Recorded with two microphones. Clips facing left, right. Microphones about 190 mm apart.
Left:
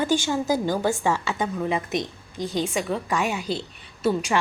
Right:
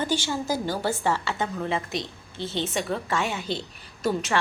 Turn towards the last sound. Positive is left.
turn(degrees=10)  # may be behind; listen again after turning